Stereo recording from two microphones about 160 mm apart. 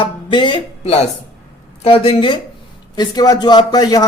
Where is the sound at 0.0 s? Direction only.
30° left (ahead or behind).